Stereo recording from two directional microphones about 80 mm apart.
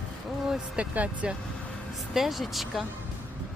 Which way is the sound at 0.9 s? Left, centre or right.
Centre.